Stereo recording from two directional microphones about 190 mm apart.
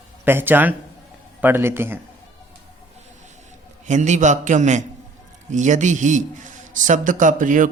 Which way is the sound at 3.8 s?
40° right (ahead or behind).